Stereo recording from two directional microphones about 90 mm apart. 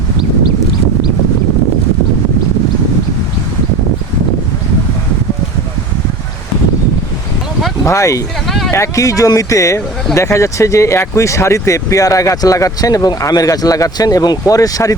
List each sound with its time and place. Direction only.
7.9 s speech: 35° left (ahead or behind)
8.4 s speech: centre (ahead or behind)
8.7 s speech: 35° left (ahead or behind)